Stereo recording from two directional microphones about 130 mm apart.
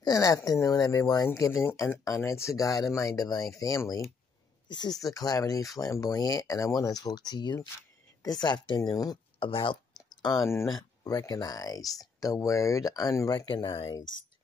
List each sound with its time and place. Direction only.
0.0 s speech: 25° left (ahead or behind)
9.4 s a sound: 40° left (ahead or behind)
10.5 s speech: 25° left (ahead or behind)
13.8 s speech: 25° left (ahead or behind)